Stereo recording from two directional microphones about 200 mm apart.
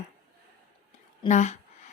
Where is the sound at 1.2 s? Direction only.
35° left (ahead or behind).